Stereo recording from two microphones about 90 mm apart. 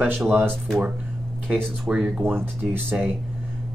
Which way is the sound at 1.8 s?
10° right (ahead or behind).